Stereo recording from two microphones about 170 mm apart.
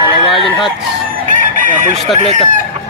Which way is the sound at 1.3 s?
50° right (ahead or behind).